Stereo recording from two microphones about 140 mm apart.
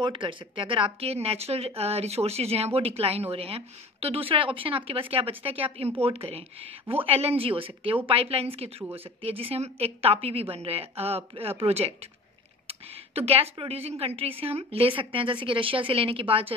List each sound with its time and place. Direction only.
0.0 s a woman's voice: 35° right (ahead or behind)